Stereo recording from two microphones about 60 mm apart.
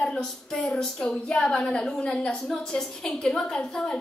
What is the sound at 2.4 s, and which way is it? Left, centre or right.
A woman's voice, centre.